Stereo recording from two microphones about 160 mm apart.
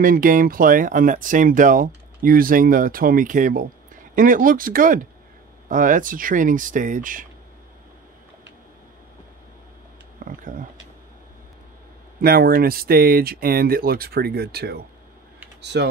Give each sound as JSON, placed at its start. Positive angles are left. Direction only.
{"t": 0.0, "sound": "speech", "side_deg": -60}
{"t": 10.2, "sound": "speech", "side_deg": -55}
{"t": 12.2, "sound": "speech", "side_deg": -70}
{"t": 15.6, "sound": "speech", "side_deg": -90}